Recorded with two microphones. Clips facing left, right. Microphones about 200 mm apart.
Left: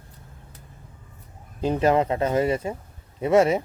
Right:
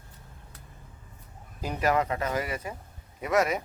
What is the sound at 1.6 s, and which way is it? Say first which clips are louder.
Speech: left 6 dB; 25° left (ahead or behind).